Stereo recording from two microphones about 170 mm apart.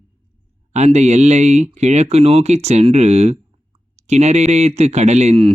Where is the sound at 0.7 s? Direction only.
40° right (ahead or behind).